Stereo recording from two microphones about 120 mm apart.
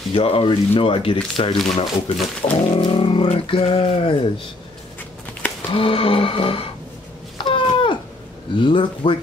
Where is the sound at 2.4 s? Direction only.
55° left (ahead or behind).